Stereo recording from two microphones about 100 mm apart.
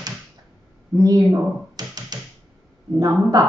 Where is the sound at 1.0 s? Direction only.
35° right (ahead or behind).